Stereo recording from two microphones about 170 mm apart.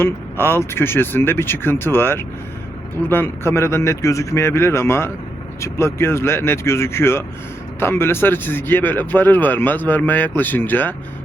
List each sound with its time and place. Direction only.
0.0 s a man's voice: 15° left (ahead or behind)